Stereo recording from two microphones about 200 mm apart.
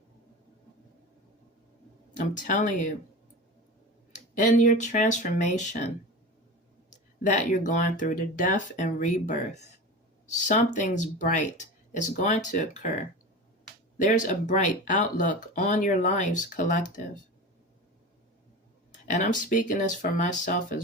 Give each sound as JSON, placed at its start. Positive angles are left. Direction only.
{"t": 2.1, "sound": "speech", "side_deg": 40}
{"t": 4.1, "sound": "speech", "side_deg": 40}
{"t": 6.9, "sound": "speech", "side_deg": 40}
{"t": 18.9, "sound": "speech", "side_deg": 40}